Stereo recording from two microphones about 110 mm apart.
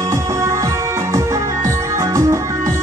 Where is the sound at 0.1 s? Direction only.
30° right (ahead or behind).